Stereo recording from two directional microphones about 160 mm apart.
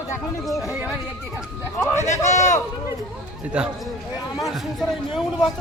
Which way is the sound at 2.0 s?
45° left (ahead or behind).